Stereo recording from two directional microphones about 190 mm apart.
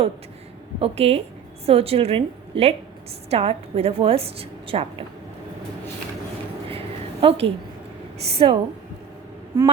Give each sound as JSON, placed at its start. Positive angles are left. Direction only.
{"t": 0.8, "sound": "a woman's voice", "side_deg": -30}
{"t": 6.7, "sound": "a sound", "side_deg": -30}
{"t": 8.3, "sound": "a woman's voice", "side_deg": -30}
{"t": 9.5, "sound": "quack", "side_deg": -20}